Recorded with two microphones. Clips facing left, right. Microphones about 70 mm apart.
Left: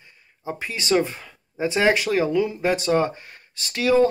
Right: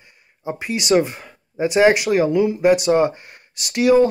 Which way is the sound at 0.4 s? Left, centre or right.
Centre.